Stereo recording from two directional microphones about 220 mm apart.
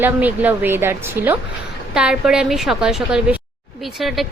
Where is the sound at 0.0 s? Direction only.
5° right (ahead or behind).